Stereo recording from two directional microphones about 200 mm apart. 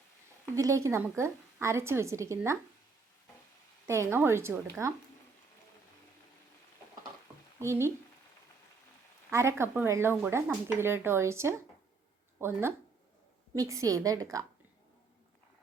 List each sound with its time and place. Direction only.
0.5 s speech: 15° right (ahead or behind)
3.8 s speech: 15° right (ahead or behind)
7.6 s speech: 15° right (ahead or behind)
9.3 s speech: 15° right (ahead or behind)